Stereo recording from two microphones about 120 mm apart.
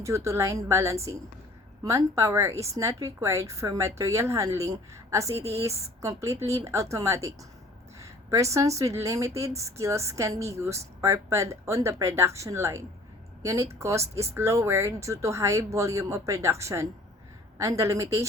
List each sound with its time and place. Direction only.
0.0 s speech: 25° right (ahead or behind)